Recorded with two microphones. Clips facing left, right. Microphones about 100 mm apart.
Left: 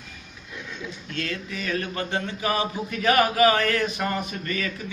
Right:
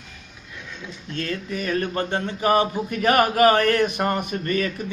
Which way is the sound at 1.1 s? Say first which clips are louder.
Right 4 dB; 40° right (ahead or behind).